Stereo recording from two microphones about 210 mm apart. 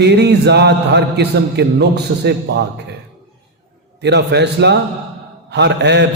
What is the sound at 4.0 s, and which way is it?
A man's voice, 55° right (ahead or behind).